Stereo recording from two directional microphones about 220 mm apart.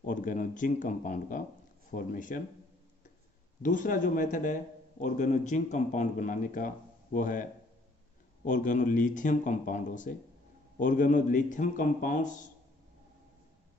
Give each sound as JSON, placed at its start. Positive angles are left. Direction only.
{"t": 0.0, "sound": "a man's voice", "side_deg": 35}
{"t": 3.6, "sound": "a man's voice", "side_deg": 35}
{"t": 8.5, "sound": "a man's voice", "side_deg": 35}